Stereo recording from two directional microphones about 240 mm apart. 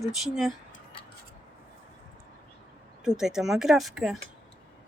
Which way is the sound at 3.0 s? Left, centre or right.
Centre.